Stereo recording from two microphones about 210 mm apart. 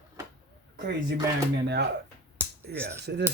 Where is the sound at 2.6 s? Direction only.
50° right (ahead or behind).